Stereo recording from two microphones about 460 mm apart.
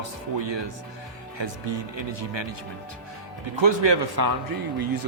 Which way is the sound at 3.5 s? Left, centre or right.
Right.